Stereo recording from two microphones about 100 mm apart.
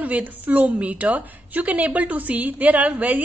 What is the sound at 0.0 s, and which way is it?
A woman's voice, 15° right (ahead or behind).